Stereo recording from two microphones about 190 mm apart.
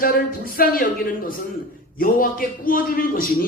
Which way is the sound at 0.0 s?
50° left (ahead or behind).